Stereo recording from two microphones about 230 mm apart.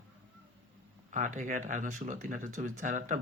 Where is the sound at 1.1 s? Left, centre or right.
Right.